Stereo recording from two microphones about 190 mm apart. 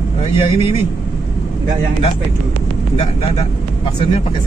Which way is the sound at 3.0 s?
30° left (ahead or behind).